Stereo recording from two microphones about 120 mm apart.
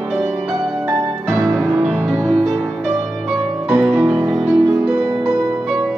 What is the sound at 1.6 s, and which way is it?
Music, 15° right (ahead or behind).